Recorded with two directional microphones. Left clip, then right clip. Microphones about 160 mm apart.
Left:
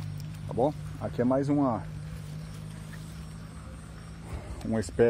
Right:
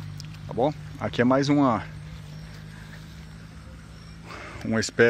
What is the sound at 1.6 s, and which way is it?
Speech, 30° right (ahead or behind).